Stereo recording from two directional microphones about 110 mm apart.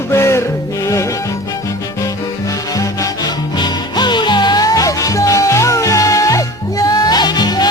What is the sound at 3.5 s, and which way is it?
Music, 40° left (ahead or behind).